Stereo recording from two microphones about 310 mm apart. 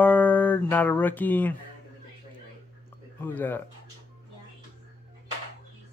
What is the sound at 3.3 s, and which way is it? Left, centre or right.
Speech, centre.